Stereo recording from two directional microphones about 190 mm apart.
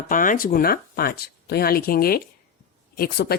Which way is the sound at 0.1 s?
45° left (ahead or behind).